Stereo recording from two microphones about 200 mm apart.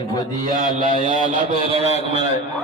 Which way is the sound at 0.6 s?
40° right (ahead or behind).